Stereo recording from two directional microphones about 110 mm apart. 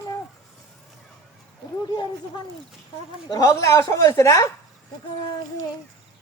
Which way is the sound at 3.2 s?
35° left (ahead or behind).